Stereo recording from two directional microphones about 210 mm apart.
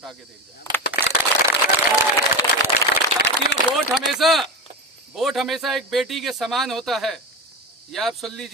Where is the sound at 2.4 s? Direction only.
15° left (ahead or behind).